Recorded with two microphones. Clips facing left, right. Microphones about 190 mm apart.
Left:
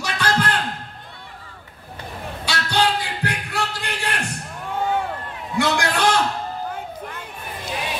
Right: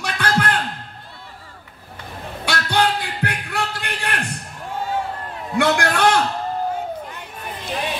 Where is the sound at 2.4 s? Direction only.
55° right (ahead or behind).